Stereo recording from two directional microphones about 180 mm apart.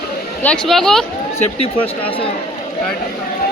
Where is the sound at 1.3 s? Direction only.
30° left (ahead or behind).